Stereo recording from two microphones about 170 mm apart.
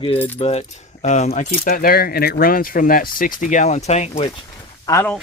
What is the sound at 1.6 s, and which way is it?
Speech, 55° left (ahead or behind).